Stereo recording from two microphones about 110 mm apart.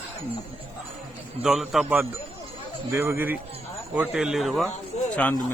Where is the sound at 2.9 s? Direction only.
20° right (ahead or behind).